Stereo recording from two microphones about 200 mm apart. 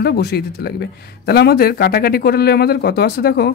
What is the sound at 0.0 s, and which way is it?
Speech, 50° left (ahead or behind).